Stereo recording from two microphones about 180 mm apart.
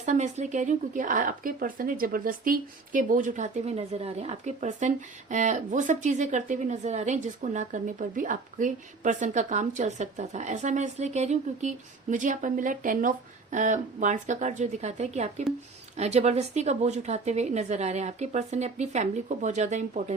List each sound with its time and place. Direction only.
0.0 s speech: 40° right (ahead or behind)